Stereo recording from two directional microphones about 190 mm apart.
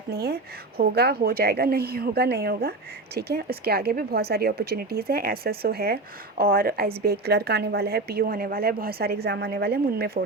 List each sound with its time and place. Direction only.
0.1 s a woman's voice: 55° right (ahead or behind)